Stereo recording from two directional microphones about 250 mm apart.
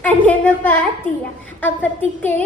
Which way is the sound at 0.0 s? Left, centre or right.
Centre.